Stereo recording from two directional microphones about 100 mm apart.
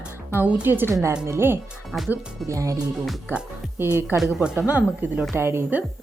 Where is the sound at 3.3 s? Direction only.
20° right (ahead or behind).